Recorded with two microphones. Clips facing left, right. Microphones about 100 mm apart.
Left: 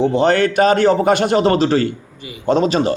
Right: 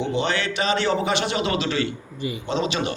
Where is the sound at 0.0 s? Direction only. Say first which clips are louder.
Left 10 dB; 40° left (ahead or behind).